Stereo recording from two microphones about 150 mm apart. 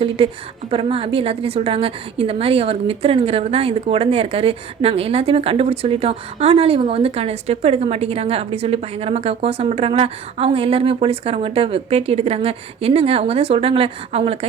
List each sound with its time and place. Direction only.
0.7 s a woman's voice: 40° right (ahead or behind)